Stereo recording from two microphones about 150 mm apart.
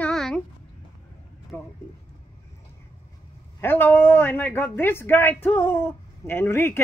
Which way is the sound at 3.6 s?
15° left (ahead or behind).